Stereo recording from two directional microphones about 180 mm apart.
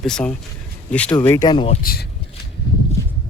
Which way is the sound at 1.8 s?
55° left (ahead or behind).